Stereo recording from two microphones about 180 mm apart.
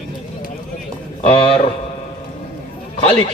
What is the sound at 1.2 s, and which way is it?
Speech, 30° left (ahead or behind).